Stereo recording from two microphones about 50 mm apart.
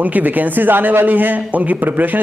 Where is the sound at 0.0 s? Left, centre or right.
Right.